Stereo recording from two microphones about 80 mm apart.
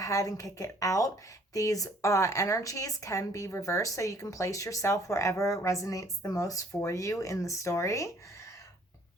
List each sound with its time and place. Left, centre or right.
0.0 s a woman's voice: left